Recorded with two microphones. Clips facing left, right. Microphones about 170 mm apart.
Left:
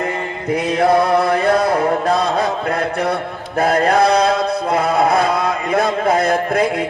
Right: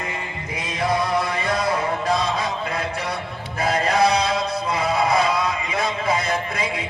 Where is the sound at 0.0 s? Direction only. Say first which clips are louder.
Left 9 dB; 60° left (ahead or behind).